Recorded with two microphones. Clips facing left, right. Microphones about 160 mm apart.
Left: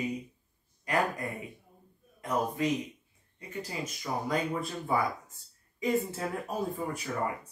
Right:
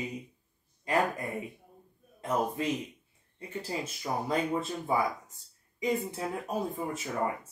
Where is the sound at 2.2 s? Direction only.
30° right (ahead or behind).